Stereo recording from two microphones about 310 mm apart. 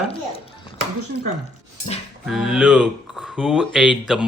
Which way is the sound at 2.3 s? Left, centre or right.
Centre.